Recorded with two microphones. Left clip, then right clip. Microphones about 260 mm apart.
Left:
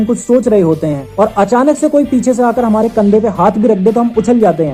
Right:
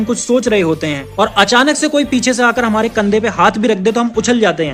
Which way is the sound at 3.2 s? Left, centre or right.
Right.